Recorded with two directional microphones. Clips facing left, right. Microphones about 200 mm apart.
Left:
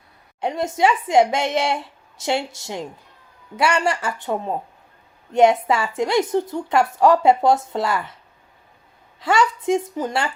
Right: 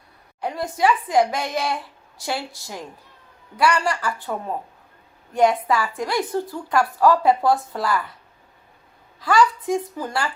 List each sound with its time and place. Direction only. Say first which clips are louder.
0.4 s a woman's voice: left 2 dB; 25° left (ahead or behind)
9.2 s a woman's voice: even; 25° left (ahead or behind)